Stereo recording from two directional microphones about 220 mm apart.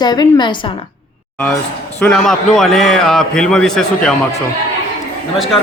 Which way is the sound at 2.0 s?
5° left (ahead or behind).